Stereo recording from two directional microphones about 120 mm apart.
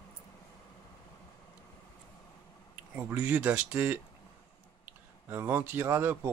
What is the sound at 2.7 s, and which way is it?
Speech, 15° right (ahead or behind).